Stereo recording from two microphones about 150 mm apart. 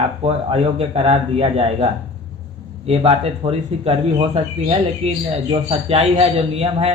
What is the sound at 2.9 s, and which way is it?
Speech, 40° right (ahead or behind).